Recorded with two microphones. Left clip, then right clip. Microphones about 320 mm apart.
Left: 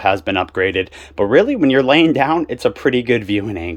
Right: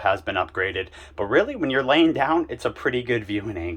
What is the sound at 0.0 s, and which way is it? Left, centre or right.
Speech, left.